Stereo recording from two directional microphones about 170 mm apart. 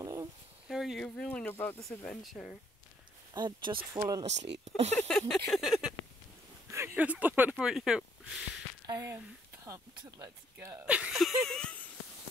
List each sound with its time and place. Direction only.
0.0 s a sound: 20° right (ahead or behind)
0.7 s speech: centre (ahead or behind)
1.8 s speech: centre (ahead or behind)
3.3 s speech: 25° right (ahead or behind)
4.9 s a sound: 5° left (ahead or behind)
5.5 s speech: centre (ahead or behind)
6.7 s speech: 15° right (ahead or behind)
8.8 s speech: 15° right (ahead or behind); by 11.9 s 5° left (ahead or behind)